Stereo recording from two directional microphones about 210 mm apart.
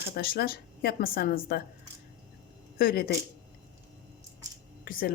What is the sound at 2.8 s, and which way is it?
Speech, 45° left (ahead or behind).